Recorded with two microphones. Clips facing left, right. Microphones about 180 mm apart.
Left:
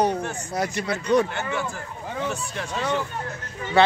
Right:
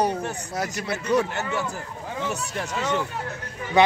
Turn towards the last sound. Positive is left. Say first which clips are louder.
# even
turn(degrees=-15)  # may be behind; listen again after turning